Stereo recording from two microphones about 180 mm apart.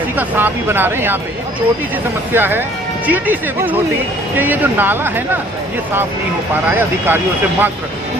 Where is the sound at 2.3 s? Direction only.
10° right (ahead or behind).